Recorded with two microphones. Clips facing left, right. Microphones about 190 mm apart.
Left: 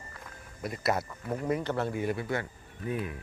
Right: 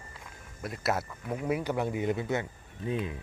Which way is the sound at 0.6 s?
Centre (ahead or behind).